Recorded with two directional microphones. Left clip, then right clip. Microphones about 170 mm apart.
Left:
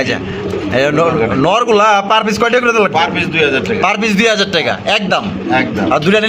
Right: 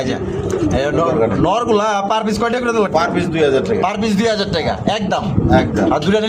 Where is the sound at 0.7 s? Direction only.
25° left (ahead or behind).